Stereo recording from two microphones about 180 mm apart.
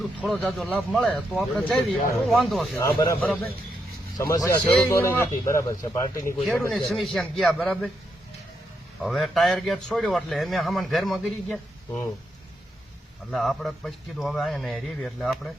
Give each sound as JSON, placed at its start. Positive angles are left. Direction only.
{"t": 0.0, "sound": "a man's voice", "side_deg": 0}
{"t": 3.0, "sound": "speech", "side_deg": 15}
{"t": 6.5, "sound": "a man's voice", "side_deg": 5}
{"t": 9.0, "sound": "a man's voice", "side_deg": 0}
{"t": 13.3, "sound": "a man's voice", "side_deg": 0}